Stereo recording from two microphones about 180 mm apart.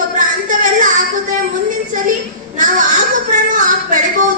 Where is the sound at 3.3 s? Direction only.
45° right (ahead or behind).